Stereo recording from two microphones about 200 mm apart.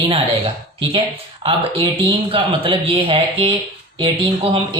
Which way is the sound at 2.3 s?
25° right (ahead or behind).